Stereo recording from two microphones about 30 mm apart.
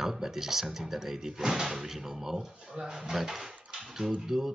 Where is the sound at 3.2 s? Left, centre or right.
Centre.